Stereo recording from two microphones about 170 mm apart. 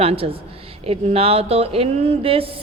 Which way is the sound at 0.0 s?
35° right (ahead or behind).